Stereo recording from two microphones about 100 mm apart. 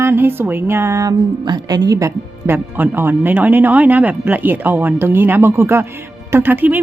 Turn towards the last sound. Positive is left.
turn(degrees=-20)  # may be behind; listen again after turning